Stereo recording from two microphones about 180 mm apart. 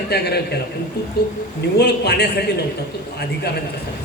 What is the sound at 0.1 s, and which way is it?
Speech, 65° left (ahead or behind).